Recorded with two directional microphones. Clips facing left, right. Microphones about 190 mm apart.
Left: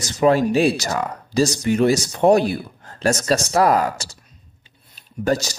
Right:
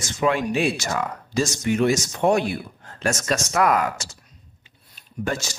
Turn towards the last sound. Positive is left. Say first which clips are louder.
# left 6 dB
turn(degrees=35)  # may be behind; listen again after turning